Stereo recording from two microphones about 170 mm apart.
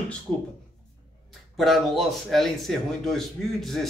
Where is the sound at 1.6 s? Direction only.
Centre (ahead or behind).